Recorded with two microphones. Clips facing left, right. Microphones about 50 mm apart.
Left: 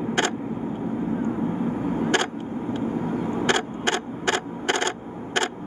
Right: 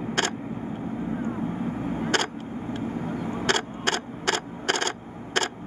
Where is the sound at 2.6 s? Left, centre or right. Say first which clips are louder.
Left 4 dB; centre.